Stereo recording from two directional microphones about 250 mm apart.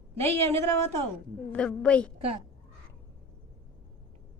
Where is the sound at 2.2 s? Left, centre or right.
Right.